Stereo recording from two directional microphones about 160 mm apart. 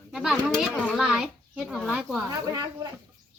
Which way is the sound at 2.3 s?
25° right (ahead or behind).